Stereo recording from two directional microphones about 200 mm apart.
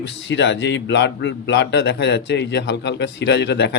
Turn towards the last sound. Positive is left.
turn(degrees=60)  # may be behind; listen again after turning